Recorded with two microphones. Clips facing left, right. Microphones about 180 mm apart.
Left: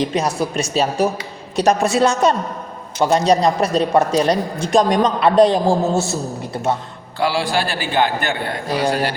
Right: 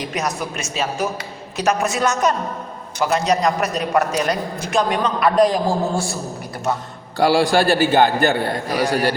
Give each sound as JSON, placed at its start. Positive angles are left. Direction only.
{"t": 0.0, "sound": "a woman's voice", "side_deg": 30}
{"t": 7.2, "sound": "a man's voice", "side_deg": -45}